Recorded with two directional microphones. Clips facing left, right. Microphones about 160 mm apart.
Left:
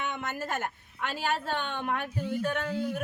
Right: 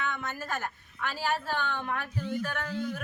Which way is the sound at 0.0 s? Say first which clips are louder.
Left 1 dB; 20° left (ahead or behind).